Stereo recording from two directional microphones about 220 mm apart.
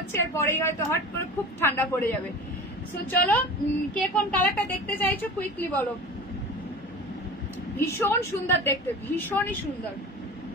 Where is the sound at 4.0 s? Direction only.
5° left (ahead or behind).